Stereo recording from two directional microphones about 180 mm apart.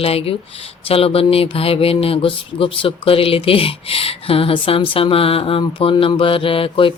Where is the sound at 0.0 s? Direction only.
30° left (ahead or behind).